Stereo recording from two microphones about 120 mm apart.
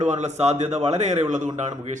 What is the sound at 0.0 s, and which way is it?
A man's voice, 85° right.